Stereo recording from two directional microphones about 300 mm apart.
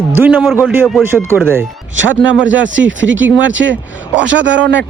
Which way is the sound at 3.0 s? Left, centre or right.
Right.